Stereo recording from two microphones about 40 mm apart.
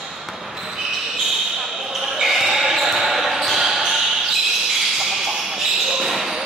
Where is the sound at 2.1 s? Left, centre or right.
Centre.